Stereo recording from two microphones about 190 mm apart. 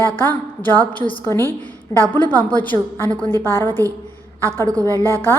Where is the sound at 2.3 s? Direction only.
20° right (ahead or behind).